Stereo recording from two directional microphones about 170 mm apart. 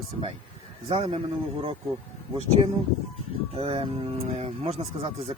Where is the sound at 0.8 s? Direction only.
35° right (ahead or behind).